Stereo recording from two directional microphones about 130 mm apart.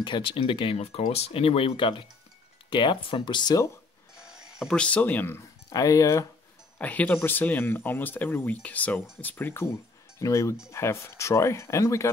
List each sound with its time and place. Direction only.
0.0 s speech: 40° left (ahead or behind)
4.3 s music: 5° right (ahead or behind)
4.7 s speech: 10° left (ahead or behind)
5.7 s speech: 25° left (ahead or behind)
6.8 s speech: 10° left (ahead or behind)